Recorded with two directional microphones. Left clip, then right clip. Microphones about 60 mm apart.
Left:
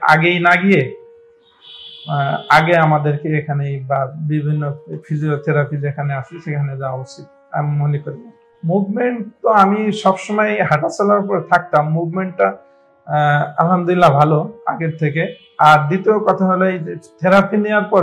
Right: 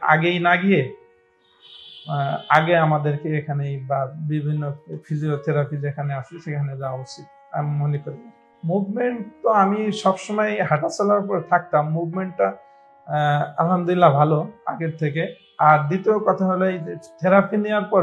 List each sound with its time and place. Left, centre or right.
0.2 s speech: right
2.0 s a man's voice: right
14.6 s music: right
15.0 s a man's voice: right